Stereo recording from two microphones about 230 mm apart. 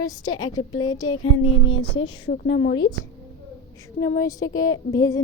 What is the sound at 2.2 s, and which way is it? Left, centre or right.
Speech, left.